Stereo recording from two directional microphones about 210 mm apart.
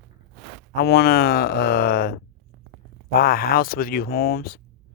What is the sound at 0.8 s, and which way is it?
Speech, 50° left (ahead or behind).